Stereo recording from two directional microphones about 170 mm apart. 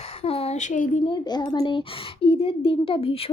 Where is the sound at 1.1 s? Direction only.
25° left (ahead or behind).